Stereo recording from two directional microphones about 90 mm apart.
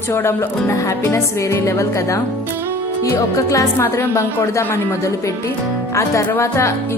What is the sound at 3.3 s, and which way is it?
A woman's voice, 35° left (ahead or behind).